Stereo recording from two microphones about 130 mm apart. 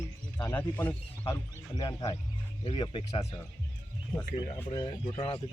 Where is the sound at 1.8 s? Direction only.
35° left (ahead or behind).